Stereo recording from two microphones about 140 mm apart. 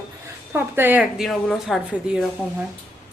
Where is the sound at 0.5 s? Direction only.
15° right (ahead or behind).